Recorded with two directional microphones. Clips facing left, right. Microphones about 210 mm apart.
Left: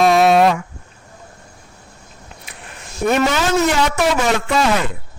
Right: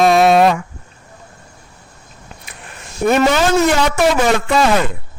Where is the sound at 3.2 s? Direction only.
45° right (ahead or behind).